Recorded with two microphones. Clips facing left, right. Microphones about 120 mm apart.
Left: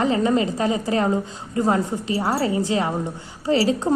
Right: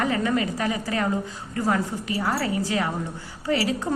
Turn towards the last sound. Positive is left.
turn(degrees=30)  # may be behind; listen again after turning